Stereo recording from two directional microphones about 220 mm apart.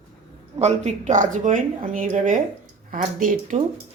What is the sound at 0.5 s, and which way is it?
A woman's voice, 30° right (ahead or behind).